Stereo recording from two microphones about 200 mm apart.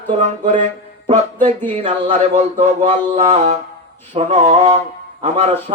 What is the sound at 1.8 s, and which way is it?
Music, 35° right (ahead or behind).